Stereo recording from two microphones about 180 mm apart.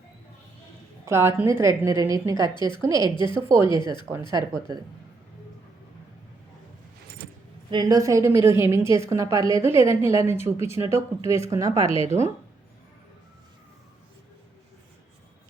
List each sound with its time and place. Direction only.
1.0 s a woman's voice: 15° right (ahead or behind)
2.6 s a woman's voice: 25° left (ahead or behind)
2.8 s a woman's voice: 20° right (ahead or behind)
7.7 s a woman's voice: 20° right (ahead or behind)
12.1 s speech: 35° right (ahead or behind)